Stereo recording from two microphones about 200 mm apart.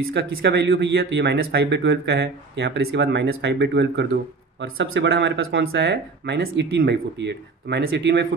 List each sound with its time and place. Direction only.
0.1 s speech: 55° right (ahead or behind)